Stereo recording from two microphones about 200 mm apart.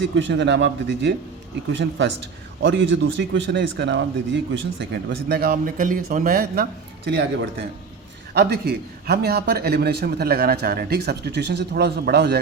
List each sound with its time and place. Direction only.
0.0 s a man's voice: 65° right (ahead or behind)